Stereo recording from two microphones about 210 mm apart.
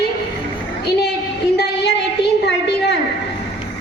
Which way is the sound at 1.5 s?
55° left (ahead or behind).